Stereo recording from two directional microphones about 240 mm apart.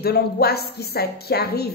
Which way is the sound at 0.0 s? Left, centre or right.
Left.